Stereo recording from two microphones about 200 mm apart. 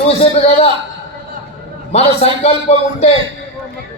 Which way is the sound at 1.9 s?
30° left (ahead or behind).